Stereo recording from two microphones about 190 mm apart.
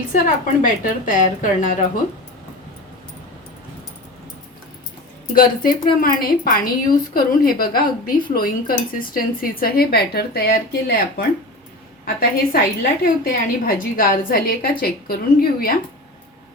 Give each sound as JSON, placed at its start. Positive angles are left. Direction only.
{"t": 0.1, "sound": "a woman's voice", "side_deg": 45}
{"t": 5.3, "sound": "a woman's voice", "side_deg": 50}
{"t": 12.0, "sound": "a woman's voice", "side_deg": 50}